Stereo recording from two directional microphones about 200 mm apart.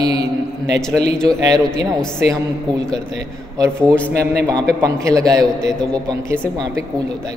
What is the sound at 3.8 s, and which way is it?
Speech, 5° left (ahead or behind).